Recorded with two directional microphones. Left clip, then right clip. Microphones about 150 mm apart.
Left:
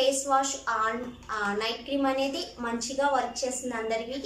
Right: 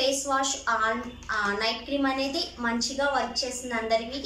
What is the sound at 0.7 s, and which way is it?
Child singing, 10° left (ahead or behind).